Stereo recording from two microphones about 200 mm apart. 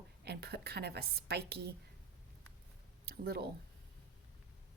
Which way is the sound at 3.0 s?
50° right (ahead or behind).